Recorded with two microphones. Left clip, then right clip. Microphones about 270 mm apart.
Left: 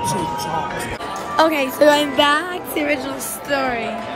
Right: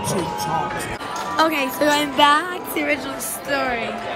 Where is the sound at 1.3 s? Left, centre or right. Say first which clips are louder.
Left 3 dB; centre.